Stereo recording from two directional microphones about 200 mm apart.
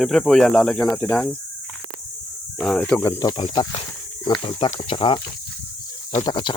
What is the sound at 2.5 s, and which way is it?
Speech, 5° left (ahead or behind).